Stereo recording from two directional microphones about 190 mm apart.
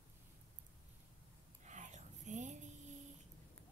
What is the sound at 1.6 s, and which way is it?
Whispering, 40° right (ahead or behind).